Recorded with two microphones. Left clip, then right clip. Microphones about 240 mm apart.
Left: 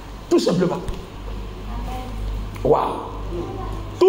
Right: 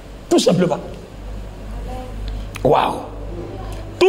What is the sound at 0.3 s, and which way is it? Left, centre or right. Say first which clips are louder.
Speech: right 3 dB; right.